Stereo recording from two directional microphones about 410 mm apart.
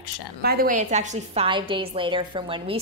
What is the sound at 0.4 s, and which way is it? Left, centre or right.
A woman's voice, right.